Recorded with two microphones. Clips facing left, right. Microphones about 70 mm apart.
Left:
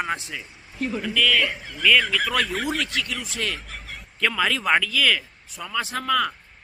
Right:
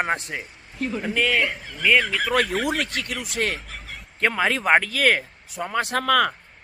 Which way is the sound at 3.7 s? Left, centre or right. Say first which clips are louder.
Even; centre.